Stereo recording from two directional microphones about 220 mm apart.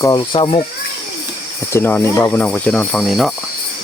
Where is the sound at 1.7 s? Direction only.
10° left (ahead or behind).